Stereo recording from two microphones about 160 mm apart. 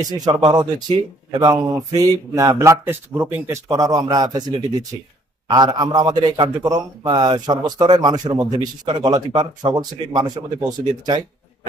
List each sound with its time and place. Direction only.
0.0 s a man's voice: 25° right (ahead or behind)